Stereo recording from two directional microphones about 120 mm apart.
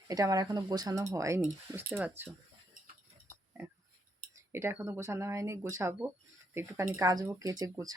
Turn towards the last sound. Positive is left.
turn(degrees=-30)  # may be behind; listen again after turning